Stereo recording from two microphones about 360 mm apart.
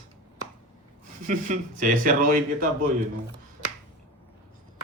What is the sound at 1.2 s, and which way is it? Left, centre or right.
Speech, right.